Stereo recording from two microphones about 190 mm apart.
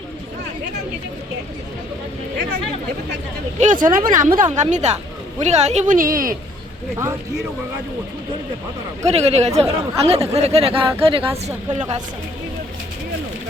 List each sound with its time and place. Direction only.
3.6 s speech: 40° right (ahead or behind)
6.9 s speech: 15° right (ahead or behind)
9.0 s speech: 35° right (ahead or behind)